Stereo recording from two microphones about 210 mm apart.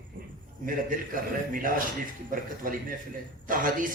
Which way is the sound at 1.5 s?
40° right (ahead or behind).